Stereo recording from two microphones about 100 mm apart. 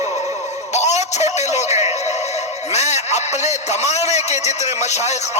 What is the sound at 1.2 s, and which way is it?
Speech, 90° left.